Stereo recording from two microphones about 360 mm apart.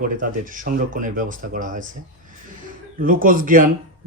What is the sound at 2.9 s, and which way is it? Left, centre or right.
Speech, right.